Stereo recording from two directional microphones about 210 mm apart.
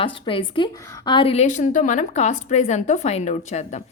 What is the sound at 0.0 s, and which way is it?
A woman's voice, 25° left (ahead or behind).